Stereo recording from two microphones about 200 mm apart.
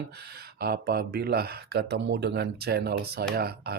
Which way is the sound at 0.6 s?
50° right (ahead or behind).